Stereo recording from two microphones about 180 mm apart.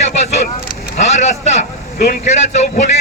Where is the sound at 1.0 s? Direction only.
40° left (ahead or behind).